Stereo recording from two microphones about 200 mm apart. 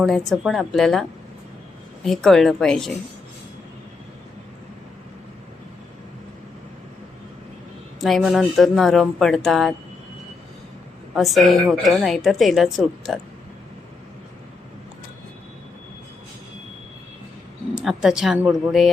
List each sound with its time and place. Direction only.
0.3 s a woman's voice: centre (ahead or behind)
2.0 s a woman's voice: centre (ahead or behind)
8.0 s a woman's voice: centre (ahead or behind)
11.1 s a woman's voice: centre (ahead or behind)
17.7 s a woman's voice: 5° right (ahead or behind)